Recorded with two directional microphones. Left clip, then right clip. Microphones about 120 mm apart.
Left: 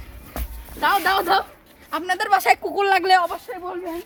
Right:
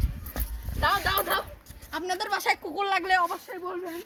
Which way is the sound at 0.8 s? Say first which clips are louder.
Left 6 dB; 40° left (ahead or behind).